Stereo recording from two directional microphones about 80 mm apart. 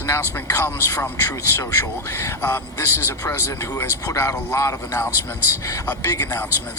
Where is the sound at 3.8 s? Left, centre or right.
Left.